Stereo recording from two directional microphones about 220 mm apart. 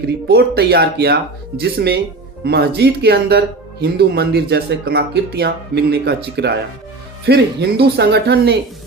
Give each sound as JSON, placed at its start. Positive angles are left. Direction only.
{"t": 0.3, "sound": "speech", "side_deg": -45}